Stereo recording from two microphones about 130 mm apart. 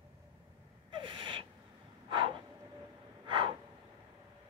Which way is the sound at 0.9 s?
40° right (ahead or behind).